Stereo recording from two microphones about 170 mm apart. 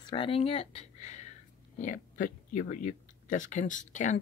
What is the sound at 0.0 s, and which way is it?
Speech, 30° left (ahead or behind).